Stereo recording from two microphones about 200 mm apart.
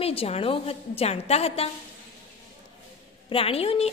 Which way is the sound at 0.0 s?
30° left (ahead or behind).